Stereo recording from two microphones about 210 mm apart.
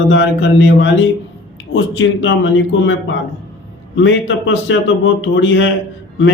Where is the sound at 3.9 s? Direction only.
60° left (ahead or behind).